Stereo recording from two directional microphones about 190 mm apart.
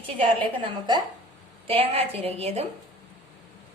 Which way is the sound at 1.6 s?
30° right (ahead or behind).